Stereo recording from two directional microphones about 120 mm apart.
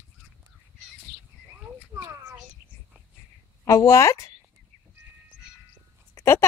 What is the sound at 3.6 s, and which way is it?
Speech, 25° left (ahead or behind).